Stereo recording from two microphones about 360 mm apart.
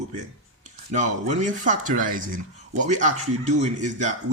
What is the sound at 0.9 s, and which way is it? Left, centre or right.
Speech, centre.